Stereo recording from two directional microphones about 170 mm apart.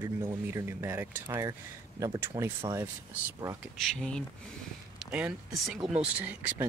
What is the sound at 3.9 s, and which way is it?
Speech, 5° left (ahead or behind).